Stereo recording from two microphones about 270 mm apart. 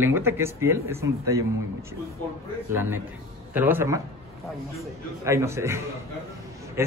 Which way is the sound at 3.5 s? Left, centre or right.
Centre.